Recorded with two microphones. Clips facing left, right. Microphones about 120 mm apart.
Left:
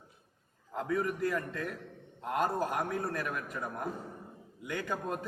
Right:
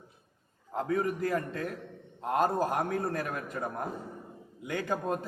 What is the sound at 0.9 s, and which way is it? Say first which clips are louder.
A man's voice: right 2 dB; 30° right (ahead or behind).